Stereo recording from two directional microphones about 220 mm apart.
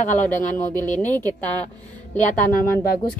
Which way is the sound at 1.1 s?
15° right (ahead or behind).